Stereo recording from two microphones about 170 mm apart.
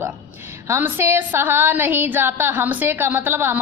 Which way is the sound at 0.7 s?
15° right (ahead or behind).